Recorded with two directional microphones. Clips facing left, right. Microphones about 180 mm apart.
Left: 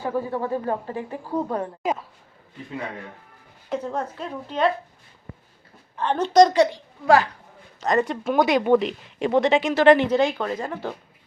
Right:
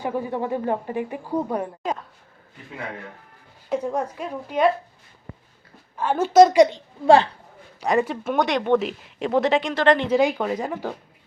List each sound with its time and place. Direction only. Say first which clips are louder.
0.0 s a woman's voice: even; 15° right (ahead or behind)
1.8 s speech: left 2 dB; 10° left (ahead or behind)
3.7 s a woman's voice: right 3 dB; 10° right (ahead or behind)
6.0 s a woman's voice: right 2 dB; 5° right (ahead or behind)
6.7 s a woman's voice: right 3 dB; 25° right (ahead or behind)
7.8 s speech: even; 10° right (ahead or behind); by 10.1 s 5° left (ahead or behind)
10.1 s a woman's voice: right 1 dB; 10° right (ahead or behind)